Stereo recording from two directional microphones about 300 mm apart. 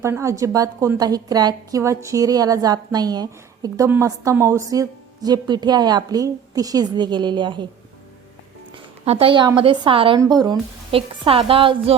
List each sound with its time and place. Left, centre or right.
0.0 s a woman's voice: centre
8.7 s a woman's voice: centre